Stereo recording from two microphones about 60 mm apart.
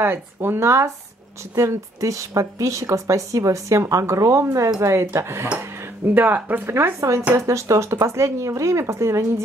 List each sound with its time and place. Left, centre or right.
0.0 s a woman's voice: right
6.1 s speech: right
6.7 s a woman's voice: right